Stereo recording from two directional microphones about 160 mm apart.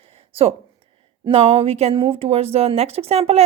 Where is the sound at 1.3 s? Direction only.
35° right (ahead or behind).